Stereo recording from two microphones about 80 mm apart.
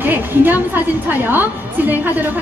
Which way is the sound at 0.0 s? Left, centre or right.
Right.